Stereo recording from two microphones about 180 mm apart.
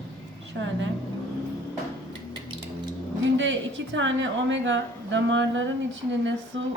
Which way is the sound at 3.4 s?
90° right.